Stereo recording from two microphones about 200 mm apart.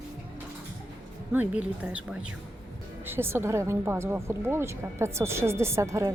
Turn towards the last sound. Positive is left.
turn(degrees=-15)  # may be behind; listen again after turning